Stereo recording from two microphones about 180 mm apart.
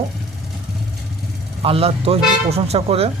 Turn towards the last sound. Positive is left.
turn(degrees=-35)  # may be behind; listen again after turning